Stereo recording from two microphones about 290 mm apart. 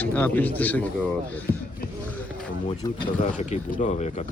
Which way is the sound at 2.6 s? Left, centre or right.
Left.